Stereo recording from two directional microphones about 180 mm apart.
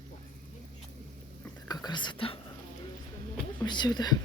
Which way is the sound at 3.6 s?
25° left (ahead or behind).